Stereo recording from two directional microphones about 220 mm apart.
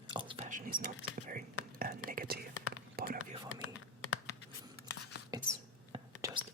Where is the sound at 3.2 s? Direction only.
75° left (ahead or behind).